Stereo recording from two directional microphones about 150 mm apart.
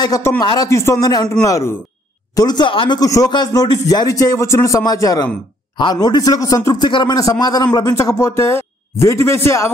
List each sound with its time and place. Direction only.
0.0 s a man's voice: 25° left (ahead or behind)